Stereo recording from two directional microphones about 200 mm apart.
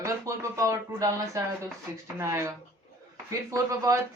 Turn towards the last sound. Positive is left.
turn(degrees=-15)  # may be behind; listen again after turning